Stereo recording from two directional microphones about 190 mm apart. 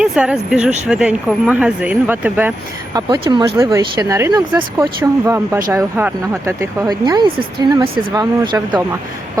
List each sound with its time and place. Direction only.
0.0 s speech: 5° right (ahead or behind)
2.9 s speech: 20° right (ahead or behind)